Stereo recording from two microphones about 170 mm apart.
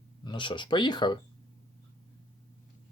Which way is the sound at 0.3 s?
30° left (ahead or behind).